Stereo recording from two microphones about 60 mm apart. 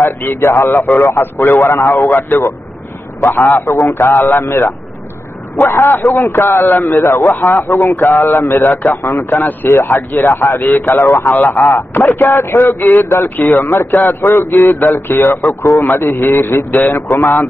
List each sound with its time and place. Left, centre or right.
0.0 s a man's voice: left
0.7 s a man's voice: left
3.5 s a man's voice: left